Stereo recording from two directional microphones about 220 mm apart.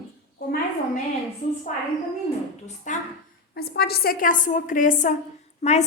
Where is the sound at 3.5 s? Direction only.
45° left (ahead or behind).